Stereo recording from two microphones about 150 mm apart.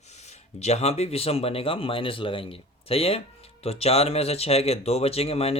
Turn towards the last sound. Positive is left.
turn(degrees=40)  # may be behind; listen again after turning